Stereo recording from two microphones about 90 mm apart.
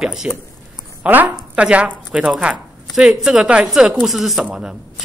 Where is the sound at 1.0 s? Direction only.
15° right (ahead or behind).